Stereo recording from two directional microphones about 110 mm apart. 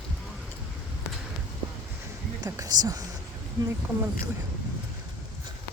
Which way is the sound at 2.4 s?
35° right (ahead or behind).